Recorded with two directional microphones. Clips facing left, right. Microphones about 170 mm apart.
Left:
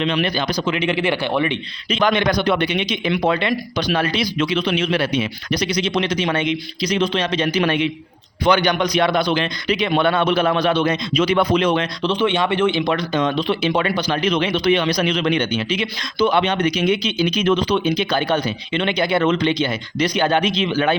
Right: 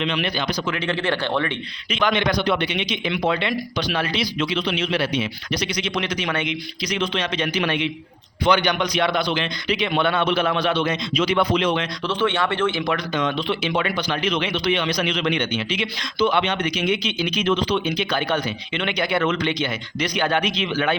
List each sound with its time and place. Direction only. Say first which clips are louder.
0.0 s speech: left 4 dB; 40° left (ahead or behind)
0.6 s speech: left 6 dB; 20° left (ahead or behind)
1.9 s a man's voice: left 3 dB; 35° left (ahead or behind)
5.5 s a man's voice: left 5 dB; 40° left (ahead or behind)
12.0 s speech: left 3 dB; 15° left (ahead or behind); by 20.9 s 35° left (ahead or behind)